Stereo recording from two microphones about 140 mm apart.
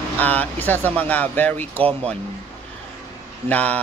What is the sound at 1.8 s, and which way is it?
Speech, 45° right (ahead or behind).